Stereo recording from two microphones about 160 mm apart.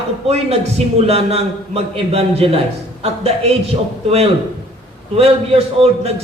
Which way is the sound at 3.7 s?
40° right (ahead or behind).